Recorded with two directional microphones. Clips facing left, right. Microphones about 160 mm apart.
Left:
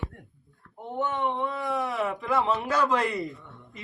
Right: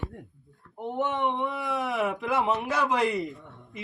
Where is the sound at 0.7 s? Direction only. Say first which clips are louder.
Right 1 dB; 15° right (ahead or behind).